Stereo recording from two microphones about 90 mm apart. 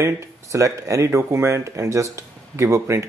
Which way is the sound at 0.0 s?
35° right (ahead or behind).